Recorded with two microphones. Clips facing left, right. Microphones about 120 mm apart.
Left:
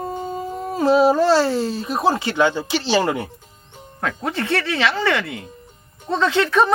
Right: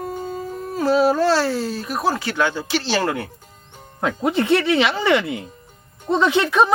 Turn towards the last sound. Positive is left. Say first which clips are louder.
# even
turn(degrees=-10)  # may be behind; listen again after turning